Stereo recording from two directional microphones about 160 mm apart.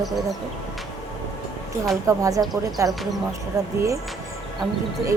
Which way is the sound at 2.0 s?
20° right (ahead or behind).